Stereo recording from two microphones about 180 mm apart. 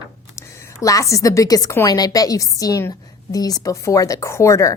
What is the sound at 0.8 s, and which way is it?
A woman's voice, 15° left (ahead or behind).